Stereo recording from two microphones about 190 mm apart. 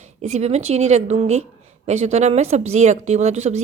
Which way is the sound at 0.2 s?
35° right (ahead or behind).